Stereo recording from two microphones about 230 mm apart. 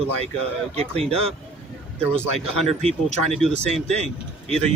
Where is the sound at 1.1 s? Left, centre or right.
Right.